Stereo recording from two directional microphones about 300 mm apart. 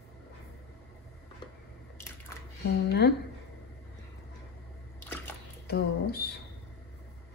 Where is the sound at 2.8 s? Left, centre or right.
Left.